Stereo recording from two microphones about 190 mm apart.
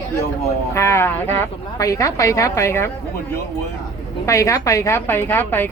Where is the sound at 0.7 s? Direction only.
15° left (ahead or behind).